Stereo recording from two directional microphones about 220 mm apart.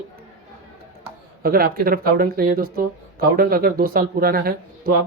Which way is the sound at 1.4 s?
40° right (ahead or behind).